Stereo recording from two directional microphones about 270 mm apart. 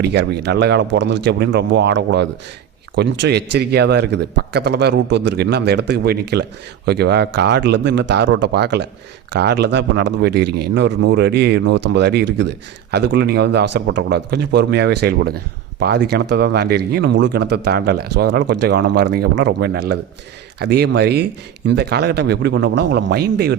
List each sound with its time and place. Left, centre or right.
0.0 s a man's voice: right